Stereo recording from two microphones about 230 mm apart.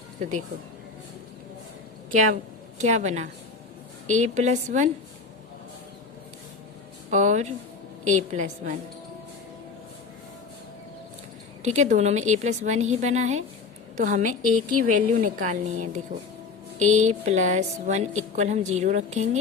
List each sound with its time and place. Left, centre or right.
0.2 s a woman's voice: right
2.7 s a woman's voice: right
7.1 s a woman's voice: right
11.6 s a woman's voice: right